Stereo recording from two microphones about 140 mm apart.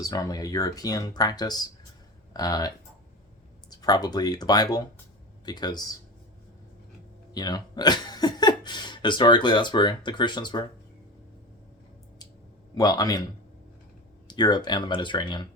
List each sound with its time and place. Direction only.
0.0 s speech: 25° left (ahead or behind)
3.8 s speech: 30° left (ahead or behind)
7.3 s speech: 30° left (ahead or behind)
12.7 s speech: 25° left (ahead or behind)
14.3 s speech: 30° left (ahead or behind)